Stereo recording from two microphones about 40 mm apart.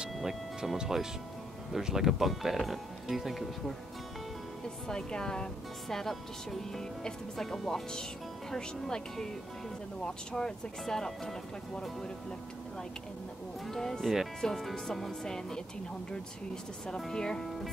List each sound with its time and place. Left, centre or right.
0.7 s speech: centre
4.8 s speech: centre
5.9 s speech: centre
7.4 s speech: centre
8.5 s speech: centre
13.7 s speech: centre
17.1 s speech: centre